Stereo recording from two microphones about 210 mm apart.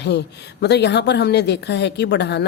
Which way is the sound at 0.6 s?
55° left (ahead or behind).